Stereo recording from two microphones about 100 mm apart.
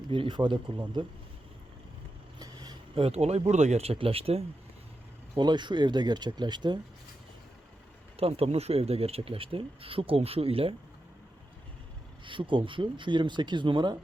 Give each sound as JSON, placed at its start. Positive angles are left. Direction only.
{"t": 0.1, "sound": "speech", "side_deg": -55}
{"t": 2.4, "sound": "a sound", "side_deg": -40}
{"t": 2.9, "sound": "speech", "side_deg": -80}
{"t": 5.4, "sound": "speech", "side_deg": -50}
{"t": 8.1, "sound": "speech", "side_deg": -80}
{"t": 12.2, "sound": "speech", "side_deg": -55}